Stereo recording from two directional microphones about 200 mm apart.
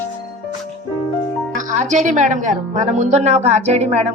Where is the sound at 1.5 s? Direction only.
40° right (ahead or behind).